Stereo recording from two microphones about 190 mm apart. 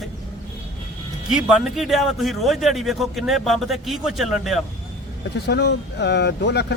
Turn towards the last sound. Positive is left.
turn(degrees=60)  # may be behind; listen again after turning